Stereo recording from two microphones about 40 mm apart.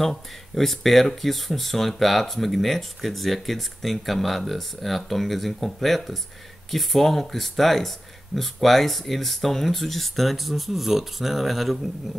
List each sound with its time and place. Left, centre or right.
0.0 s speech: centre